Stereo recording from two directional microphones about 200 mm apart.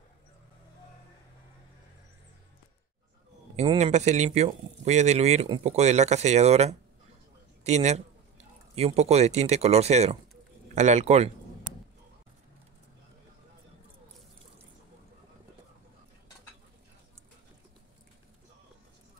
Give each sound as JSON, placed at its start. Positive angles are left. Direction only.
{"t": 3.5, "sound": "a man's voice", "side_deg": -35}